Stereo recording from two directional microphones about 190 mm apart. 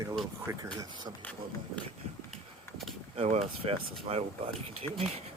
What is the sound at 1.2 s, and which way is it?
Speech, 5° left (ahead or behind).